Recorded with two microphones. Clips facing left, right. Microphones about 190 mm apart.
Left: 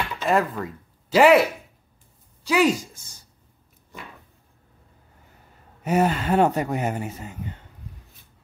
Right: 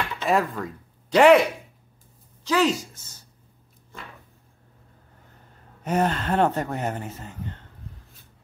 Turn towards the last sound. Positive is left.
turn(degrees=10)  # may be behind; listen again after turning